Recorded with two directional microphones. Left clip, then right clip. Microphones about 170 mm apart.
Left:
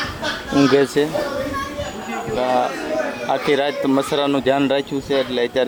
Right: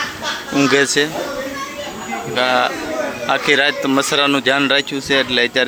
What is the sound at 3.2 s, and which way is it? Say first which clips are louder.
Speech: right 5 dB; 15° left (ahead or behind).